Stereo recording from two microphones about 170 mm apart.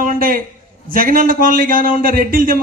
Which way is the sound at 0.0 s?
55° right (ahead or behind).